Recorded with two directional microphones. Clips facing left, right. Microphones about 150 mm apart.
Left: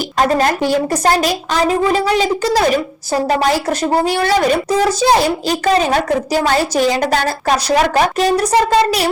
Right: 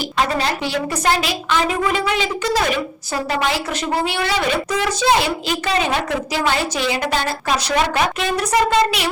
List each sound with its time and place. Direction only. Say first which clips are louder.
0.2 s a woman's voice: left 6 dB; 45° left (ahead or behind)